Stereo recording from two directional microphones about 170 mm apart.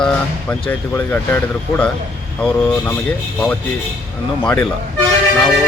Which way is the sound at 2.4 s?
5° left (ahead or behind).